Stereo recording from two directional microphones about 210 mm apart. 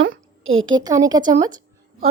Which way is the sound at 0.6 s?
20° right (ahead or behind).